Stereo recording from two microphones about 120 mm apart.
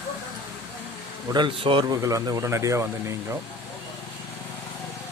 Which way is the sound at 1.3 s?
45° right (ahead or behind).